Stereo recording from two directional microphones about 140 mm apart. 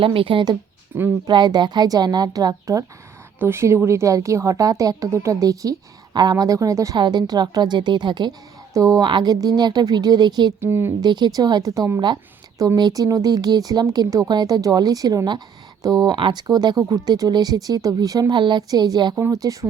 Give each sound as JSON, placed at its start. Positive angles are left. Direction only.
{"t": 0.0, "sound": "speech", "side_deg": -40}
{"t": 0.9, "sound": "speech", "side_deg": -20}
{"t": 1.3, "sound": "speech", "side_deg": -30}
{"t": 10.6, "sound": "speech", "side_deg": -15}
{"t": 11.0, "sound": "speech", "side_deg": -30}